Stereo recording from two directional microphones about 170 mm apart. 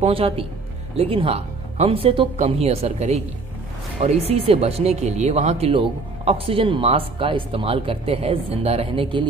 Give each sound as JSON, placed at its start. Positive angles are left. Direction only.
{"t": 0.0, "sound": "speech", "side_deg": -35}